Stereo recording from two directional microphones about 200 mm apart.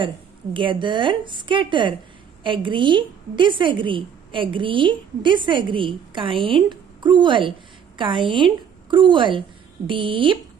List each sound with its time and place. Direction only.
0.0 s a woman's voice: 25° right (ahead or behind)